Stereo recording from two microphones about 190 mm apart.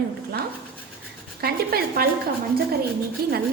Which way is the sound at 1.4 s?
55° right (ahead or behind).